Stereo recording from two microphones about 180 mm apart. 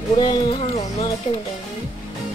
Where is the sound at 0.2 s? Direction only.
25° left (ahead or behind).